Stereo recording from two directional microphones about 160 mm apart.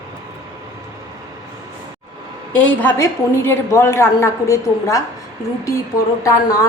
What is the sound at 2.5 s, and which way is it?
A woman's voice, 10° left (ahead or behind).